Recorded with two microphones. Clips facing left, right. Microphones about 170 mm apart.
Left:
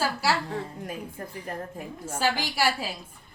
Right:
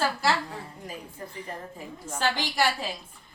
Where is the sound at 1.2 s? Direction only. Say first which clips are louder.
Left 2 dB; 60° left (ahead or behind).